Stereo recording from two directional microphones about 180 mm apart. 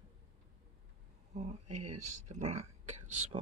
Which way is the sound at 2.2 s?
40° right (ahead or behind).